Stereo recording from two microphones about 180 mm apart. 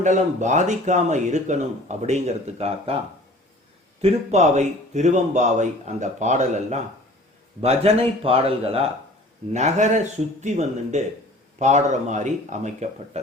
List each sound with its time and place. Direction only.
0.0 s speech: 40° right (ahead or behind)
4.0 s speech: 40° right (ahead or behind)